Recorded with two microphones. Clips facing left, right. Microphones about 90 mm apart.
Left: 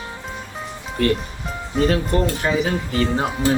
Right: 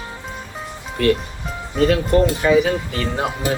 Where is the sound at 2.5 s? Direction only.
30° left (ahead or behind).